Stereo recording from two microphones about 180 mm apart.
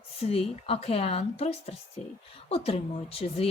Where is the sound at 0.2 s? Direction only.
35° left (ahead or behind).